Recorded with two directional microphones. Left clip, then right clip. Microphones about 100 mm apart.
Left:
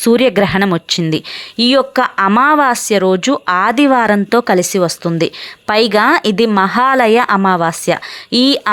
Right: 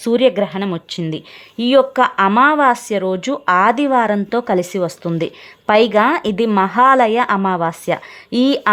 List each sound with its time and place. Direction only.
0.0 s speech: 40° left (ahead or behind)
0.4 s speech: 60° left (ahead or behind)
1.5 s speech: 35° left (ahead or behind)
3.4 s speech: 25° left (ahead or behind); by 4.4 s 40° left (ahead or behind)
5.0 s a woman's voice: 30° left (ahead or behind)